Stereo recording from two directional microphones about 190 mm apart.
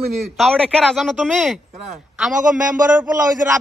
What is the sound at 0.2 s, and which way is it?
A man's voice, centre (ahead or behind).